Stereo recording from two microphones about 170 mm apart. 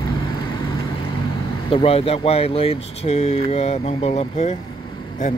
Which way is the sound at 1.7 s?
35° left (ahead or behind).